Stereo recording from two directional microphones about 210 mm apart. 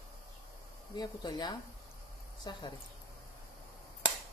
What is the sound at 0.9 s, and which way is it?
Speech, 20° left (ahead or behind).